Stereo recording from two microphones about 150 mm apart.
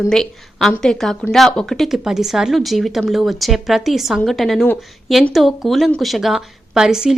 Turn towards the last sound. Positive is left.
turn(degrees=-5)  # may be behind; listen again after turning